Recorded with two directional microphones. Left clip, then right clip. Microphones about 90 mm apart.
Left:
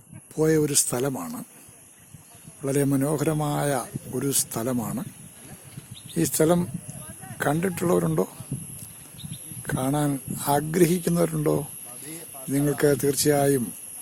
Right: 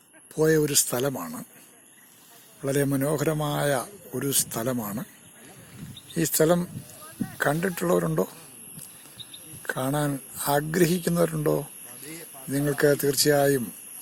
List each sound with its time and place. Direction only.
0.3 s speech: 15° left (ahead or behind)
2.6 s speech: 15° left (ahead or behind)
6.1 s speech: 20° left (ahead or behind)
9.6 s speech: 25° left (ahead or behind)